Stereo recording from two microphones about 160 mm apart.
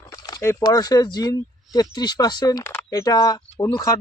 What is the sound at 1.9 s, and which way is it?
Speech, 25° left (ahead or behind).